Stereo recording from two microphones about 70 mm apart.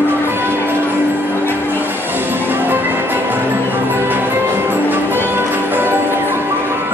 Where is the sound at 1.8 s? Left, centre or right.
Right.